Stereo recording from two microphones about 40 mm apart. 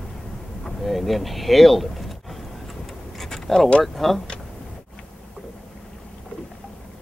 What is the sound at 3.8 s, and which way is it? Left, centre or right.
Speech, centre.